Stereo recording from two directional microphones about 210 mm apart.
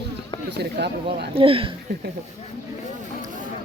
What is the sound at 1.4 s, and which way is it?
Speech, 25° right (ahead or behind).